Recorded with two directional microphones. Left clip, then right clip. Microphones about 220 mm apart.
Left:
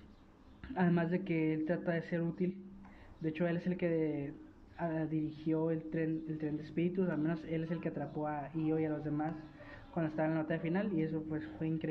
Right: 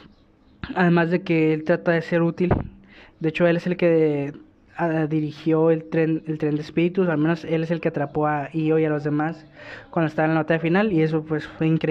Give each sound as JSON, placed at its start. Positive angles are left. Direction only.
{"t": 0.6, "sound": "speech", "side_deg": -45}